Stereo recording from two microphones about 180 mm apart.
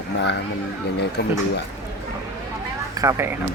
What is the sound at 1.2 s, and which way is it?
Speech, 65° left (ahead or behind).